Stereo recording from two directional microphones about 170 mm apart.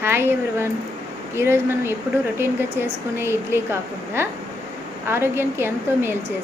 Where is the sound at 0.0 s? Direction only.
15° right (ahead or behind).